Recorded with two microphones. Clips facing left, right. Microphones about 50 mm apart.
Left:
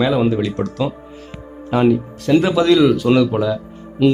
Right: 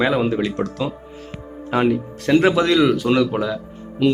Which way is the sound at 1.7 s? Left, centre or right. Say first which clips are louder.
Left 3 dB; right.